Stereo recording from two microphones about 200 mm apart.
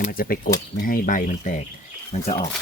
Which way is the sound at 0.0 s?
45° left (ahead or behind).